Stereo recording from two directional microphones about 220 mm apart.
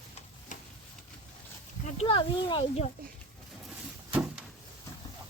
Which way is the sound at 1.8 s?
25° left (ahead or behind).